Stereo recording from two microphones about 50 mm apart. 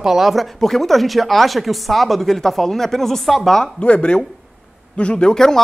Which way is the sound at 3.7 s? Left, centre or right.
Left.